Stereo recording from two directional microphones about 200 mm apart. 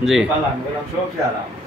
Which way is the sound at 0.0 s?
Centre (ahead or behind).